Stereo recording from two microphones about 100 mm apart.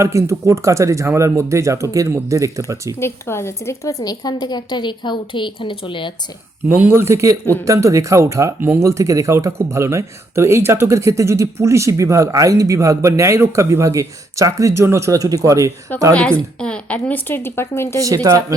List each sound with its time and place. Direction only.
0.0 s speech: 30° right (ahead or behind)
3.0 s speech: 25° left (ahead or behind); by 6.1 s 55° left (ahead or behind)
6.7 s speech: 20° right (ahead or behind)
16.6 s a woman's voice: 10° left (ahead or behind); by 18.0 s 25° left (ahead or behind)
18.0 s speech: 35° right (ahead or behind)